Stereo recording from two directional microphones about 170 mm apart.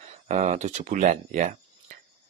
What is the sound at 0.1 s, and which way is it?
Speech, 40° right (ahead or behind).